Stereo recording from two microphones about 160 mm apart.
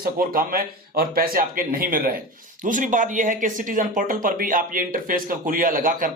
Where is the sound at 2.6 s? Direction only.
55° right (ahead or behind).